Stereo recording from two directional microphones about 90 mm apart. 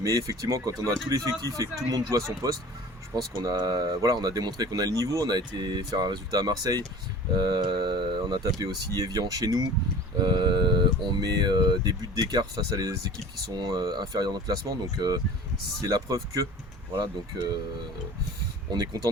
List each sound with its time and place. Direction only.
0.0 s speech: 40° right (ahead or behind); by 8.4 s 55° right (ahead or behind)
8.5 s speech: 40° right (ahead or behind)
16.9 s speech: 60° right (ahead or behind)